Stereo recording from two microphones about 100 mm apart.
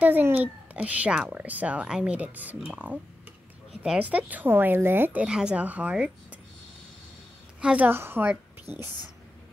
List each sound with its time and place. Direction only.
0.0 s speech: 20° right (ahead or behind)
5.2 s speech: 10° right (ahead or behind)
7.6 s speech: 15° right (ahead or behind)